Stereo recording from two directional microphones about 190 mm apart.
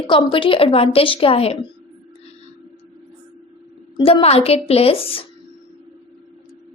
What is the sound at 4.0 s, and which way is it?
A woman's voice, 30° left (ahead or behind).